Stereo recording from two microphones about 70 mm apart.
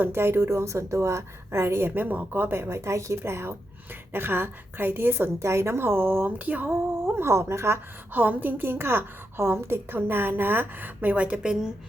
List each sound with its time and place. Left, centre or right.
0.0 s speech: right
2.0 s speech: right
5.4 s speech: right
6.7 s speech: right
8.1 s a woman's voice: right